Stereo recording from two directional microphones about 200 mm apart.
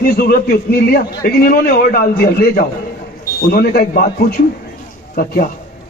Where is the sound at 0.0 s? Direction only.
50° left (ahead or behind).